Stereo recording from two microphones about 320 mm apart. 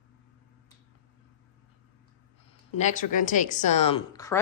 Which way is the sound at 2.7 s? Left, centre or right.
Left.